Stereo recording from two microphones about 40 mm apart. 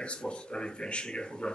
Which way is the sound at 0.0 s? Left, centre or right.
Left.